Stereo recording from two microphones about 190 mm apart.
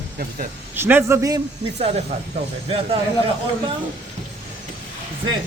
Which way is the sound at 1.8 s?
35° right (ahead or behind).